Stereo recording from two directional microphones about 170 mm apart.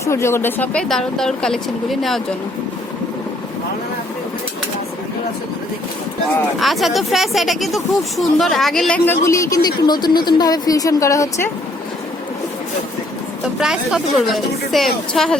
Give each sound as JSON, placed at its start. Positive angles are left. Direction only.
{"t": 0.0, "sound": "speech", "side_deg": 15}
{"t": 6.6, "sound": "speech", "side_deg": 0}
{"t": 9.2, "sound": "a woman's voice", "side_deg": 20}
{"t": 13.6, "sound": "speech", "side_deg": -5}